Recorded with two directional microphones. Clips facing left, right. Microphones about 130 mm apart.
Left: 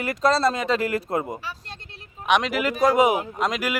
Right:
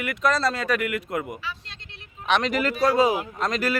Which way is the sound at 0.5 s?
20° left (ahead or behind).